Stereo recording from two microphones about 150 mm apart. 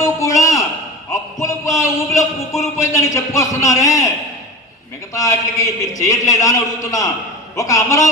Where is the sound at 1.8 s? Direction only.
20° left (ahead or behind).